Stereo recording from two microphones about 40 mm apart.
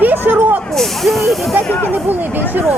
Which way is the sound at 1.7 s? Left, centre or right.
Left.